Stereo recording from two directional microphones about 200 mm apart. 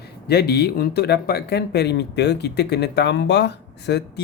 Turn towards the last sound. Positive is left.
turn(degrees=55)  # may be behind; listen again after turning